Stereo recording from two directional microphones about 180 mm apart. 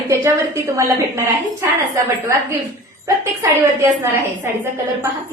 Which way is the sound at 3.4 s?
15° right (ahead or behind).